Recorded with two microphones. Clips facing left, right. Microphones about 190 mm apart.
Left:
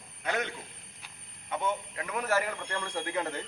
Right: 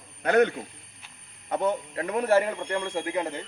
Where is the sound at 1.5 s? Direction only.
40° right (ahead or behind).